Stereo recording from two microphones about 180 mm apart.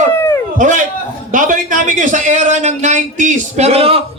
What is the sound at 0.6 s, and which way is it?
A man's voice, 45° right (ahead or behind).